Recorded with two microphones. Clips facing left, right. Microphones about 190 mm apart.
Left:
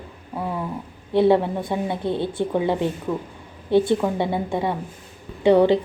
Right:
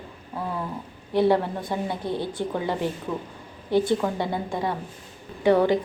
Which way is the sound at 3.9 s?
20° left (ahead or behind).